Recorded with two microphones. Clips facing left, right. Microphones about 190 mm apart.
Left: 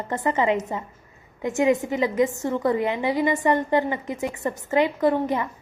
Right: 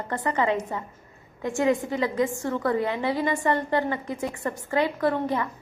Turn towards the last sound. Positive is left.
turn(degrees=20)  # may be behind; listen again after turning